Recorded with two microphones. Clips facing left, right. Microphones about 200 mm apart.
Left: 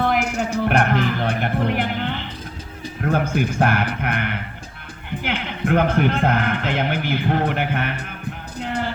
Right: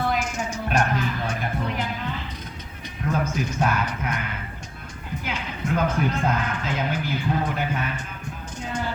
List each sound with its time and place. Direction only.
0.2 s music: 60° left (ahead or behind)
3.0 s a man's voice: 60° left (ahead or behind)
8.5 s music: 65° left (ahead or behind)